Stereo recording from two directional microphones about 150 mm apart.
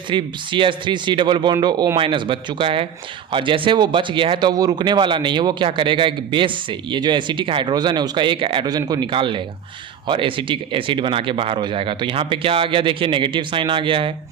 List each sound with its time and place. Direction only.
0.1 s speech: 35° right (ahead or behind)